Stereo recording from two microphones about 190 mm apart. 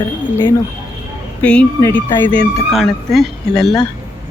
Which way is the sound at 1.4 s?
5° left (ahead or behind).